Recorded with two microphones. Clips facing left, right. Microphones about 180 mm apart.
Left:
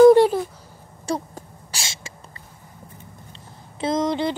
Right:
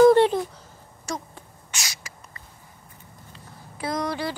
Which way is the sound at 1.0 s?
35° left (ahead or behind).